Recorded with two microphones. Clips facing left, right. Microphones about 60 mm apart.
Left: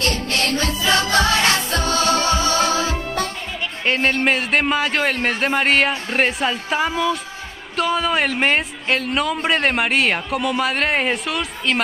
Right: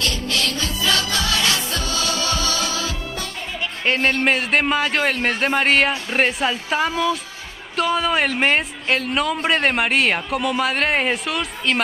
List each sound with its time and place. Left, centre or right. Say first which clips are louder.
0.0 s music: left 2 dB; left
3.8 s speech: even; centre